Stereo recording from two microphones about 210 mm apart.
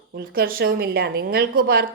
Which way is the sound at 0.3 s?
45° right (ahead or behind).